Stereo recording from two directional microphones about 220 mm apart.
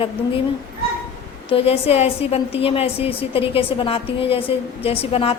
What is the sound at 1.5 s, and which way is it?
A woman's voice, 25° left (ahead or behind).